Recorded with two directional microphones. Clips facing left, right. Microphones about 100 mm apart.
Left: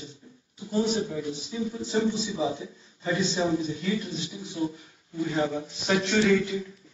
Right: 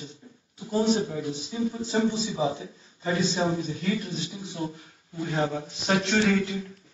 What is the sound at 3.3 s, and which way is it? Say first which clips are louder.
Speech: left 1 dB; 35° right (ahead or behind).